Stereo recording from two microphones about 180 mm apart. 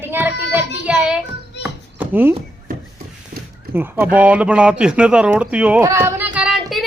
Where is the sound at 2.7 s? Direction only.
50° right (ahead or behind).